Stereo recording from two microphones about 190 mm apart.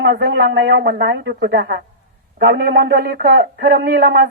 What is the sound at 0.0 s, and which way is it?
Speech, 60° right (ahead or behind).